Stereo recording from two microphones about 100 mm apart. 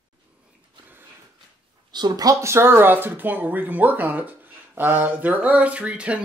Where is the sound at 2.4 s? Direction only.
25° right (ahead or behind).